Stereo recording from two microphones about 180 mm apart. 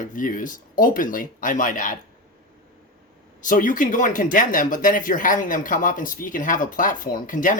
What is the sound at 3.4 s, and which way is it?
Speech, 45° left (ahead or behind).